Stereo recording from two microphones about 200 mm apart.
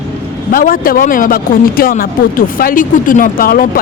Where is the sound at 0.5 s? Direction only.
45° left (ahead or behind).